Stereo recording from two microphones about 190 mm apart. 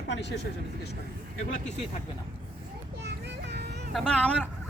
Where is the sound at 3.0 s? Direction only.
60° right (ahead or behind).